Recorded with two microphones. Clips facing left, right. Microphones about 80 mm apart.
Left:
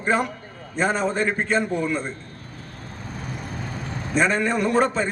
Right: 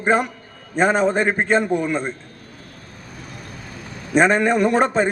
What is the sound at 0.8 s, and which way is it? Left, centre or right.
Speech, right.